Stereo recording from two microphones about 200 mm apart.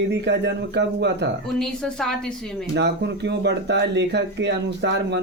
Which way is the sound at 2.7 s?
60° right (ahead or behind).